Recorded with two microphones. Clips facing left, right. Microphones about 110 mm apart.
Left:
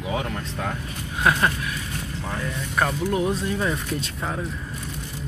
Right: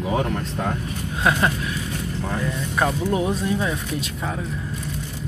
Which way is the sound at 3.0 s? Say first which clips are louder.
Right 1 dB; 20° right (ahead or behind).